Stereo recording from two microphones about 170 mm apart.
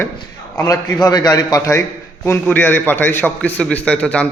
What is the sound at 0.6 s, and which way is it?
A man's voice, 20° left (ahead or behind).